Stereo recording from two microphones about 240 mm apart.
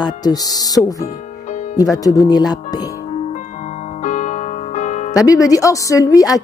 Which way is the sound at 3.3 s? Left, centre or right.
Left.